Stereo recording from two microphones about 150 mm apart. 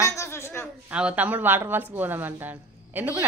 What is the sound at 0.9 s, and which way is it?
Speech, 10° right (ahead or behind).